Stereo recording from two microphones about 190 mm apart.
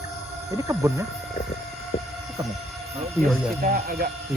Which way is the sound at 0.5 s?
15° right (ahead or behind).